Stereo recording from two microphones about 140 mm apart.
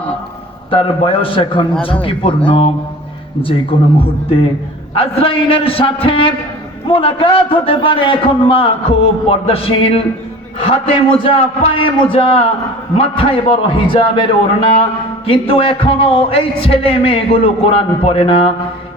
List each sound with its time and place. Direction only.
0.7 s a man's voice: 40° left (ahead or behind)
15.3 s a man's voice: 40° left (ahead or behind)